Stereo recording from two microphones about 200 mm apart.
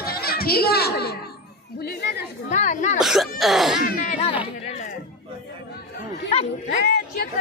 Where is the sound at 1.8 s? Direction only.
55° left (ahead or behind).